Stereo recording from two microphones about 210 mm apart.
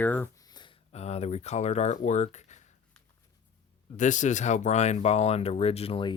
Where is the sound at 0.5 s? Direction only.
25° left (ahead or behind).